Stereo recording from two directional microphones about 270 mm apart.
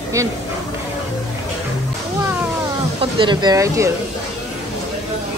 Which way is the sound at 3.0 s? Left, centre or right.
Centre.